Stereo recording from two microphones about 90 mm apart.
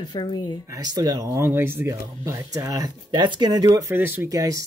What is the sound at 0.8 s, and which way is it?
Speech, 45° right (ahead or behind).